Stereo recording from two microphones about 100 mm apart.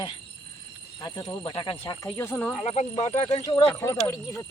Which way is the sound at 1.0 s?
50° left (ahead or behind).